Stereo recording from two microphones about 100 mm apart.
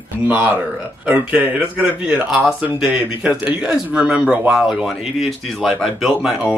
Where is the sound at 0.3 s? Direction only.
15° right (ahead or behind).